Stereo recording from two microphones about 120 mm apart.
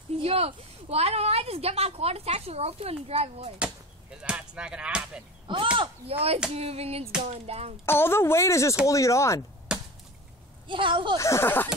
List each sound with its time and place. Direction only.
0.2 s a woman's voice: 55° right (ahead or behind)
4.2 s speech: 10° right (ahead or behind)
5.8 s a woman's voice: 55° right (ahead or behind)
7.8 s speech: 20° left (ahead or behind)
9.7 s chop: 5° right (ahead or behind)
10.7 s speech: 45° right (ahead or behind)
11.1 s speech: 25° left (ahead or behind)